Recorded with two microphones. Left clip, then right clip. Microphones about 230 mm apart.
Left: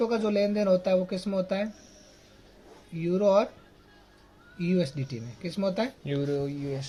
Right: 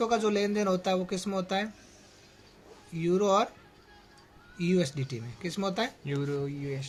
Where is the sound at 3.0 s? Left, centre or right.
Right.